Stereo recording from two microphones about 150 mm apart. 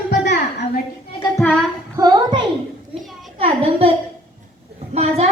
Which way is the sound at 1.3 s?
5° left (ahead or behind).